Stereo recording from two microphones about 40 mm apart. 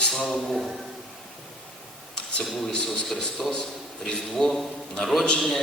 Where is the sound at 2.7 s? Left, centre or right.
Left.